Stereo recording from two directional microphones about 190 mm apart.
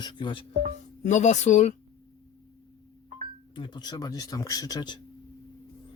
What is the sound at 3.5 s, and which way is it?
A man's voice, 25° left (ahead or behind).